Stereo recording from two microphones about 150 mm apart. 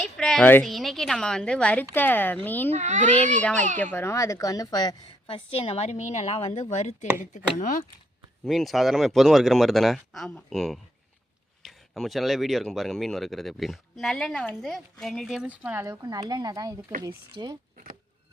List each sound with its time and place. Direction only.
0.0 s a woman's voice: 5° left (ahead or behind)
2.6 s speech: 50° right (ahead or behind)
3.9 s a woman's voice: 20° left (ahead or behind)
5.5 s a woman's voice: 45° left (ahead or behind)
7.3 s speech: 60° left (ahead or behind)
8.4 s speech: centre (ahead or behind)
15.9 s speech: 25° right (ahead or behind)